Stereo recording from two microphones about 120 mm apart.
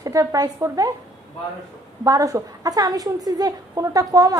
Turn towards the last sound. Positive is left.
turn(degrees=-30)  # may be behind; listen again after turning